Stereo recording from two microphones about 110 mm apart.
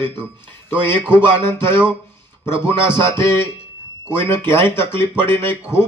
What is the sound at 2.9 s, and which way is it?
A man's voice, 25° left (ahead or behind).